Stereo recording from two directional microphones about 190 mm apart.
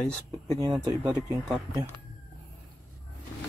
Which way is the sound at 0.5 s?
20° right (ahead or behind).